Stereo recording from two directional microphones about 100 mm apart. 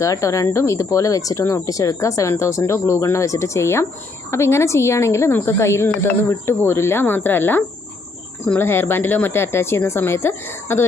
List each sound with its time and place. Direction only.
0.0 s a woman's voice: 30° left (ahead or behind)